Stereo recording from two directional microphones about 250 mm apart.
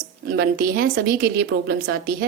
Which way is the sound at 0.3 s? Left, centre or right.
Right.